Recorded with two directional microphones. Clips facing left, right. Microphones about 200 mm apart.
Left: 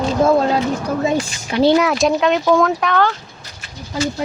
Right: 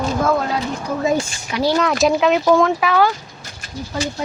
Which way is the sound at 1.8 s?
Centre (ahead or behind).